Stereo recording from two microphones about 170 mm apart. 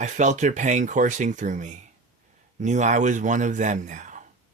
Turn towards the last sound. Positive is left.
turn(degrees=-45)  # may be behind; listen again after turning